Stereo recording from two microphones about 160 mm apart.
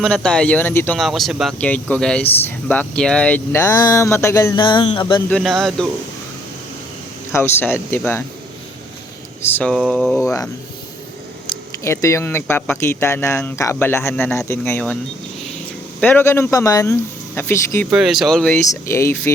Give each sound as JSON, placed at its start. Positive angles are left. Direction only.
{"t": 0.0, "sound": "speech", "side_deg": 5}
{"t": 0.9, "sound": "speech", "side_deg": 0}
{"t": 5.3, "sound": "speech", "side_deg": 0}
{"t": 7.3, "sound": "speech", "side_deg": 15}
{"t": 9.4, "sound": "speech", "side_deg": 10}
{"t": 11.8, "sound": "speech", "side_deg": 20}
{"t": 16.0, "sound": "speech", "side_deg": 10}
{"t": 17.9, "sound": "speech", "side_deg": 0}
{"t": 18.5, "sound": "speech", "side_deg": 15}